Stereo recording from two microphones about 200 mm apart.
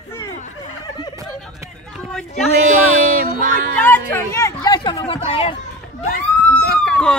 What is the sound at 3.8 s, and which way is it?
Chatter, 10° left (ahead or behind).